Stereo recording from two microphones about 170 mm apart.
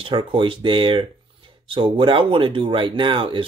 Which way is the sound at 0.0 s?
30° right (ahead or behind).